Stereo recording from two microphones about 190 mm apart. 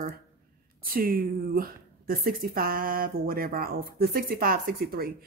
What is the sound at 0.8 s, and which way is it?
A woman's voice, 50° right (ahead or behind).